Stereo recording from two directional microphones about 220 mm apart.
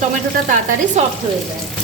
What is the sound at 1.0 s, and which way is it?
Speech, 30° right (ahead or behind).